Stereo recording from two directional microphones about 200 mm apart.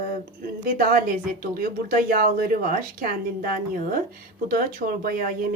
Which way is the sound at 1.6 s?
45° right (ahead or behind).